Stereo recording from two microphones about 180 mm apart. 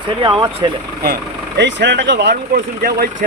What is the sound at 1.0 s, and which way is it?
Speech, 65° right (ahead or behind).